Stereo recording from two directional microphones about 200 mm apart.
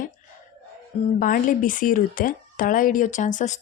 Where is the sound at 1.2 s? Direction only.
45° left (ahead or behind).